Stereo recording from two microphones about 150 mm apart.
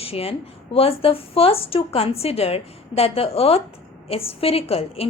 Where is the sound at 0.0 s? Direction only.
40° left (ahead or behind).